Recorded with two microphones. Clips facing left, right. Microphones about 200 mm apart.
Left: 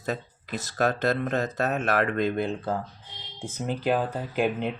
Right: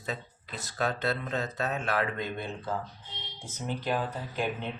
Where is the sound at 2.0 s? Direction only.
70° left (ahead or behind).